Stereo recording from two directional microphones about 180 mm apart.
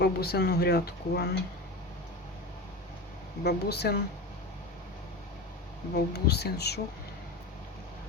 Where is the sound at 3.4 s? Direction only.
65° left (ahead or behind).